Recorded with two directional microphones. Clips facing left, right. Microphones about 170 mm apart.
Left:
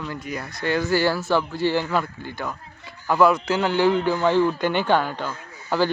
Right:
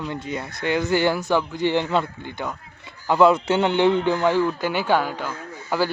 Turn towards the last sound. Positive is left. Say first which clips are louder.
# left 1 dB
turn(degrees=-10)  # may be behind; listen again after turning